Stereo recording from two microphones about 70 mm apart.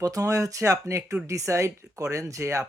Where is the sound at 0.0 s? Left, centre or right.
Right.